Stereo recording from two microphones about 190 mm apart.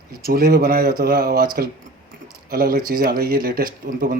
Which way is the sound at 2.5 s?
50° right (ahead or behind).